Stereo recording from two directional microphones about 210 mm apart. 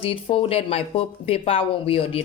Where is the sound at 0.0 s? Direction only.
25° left (ahead or behind).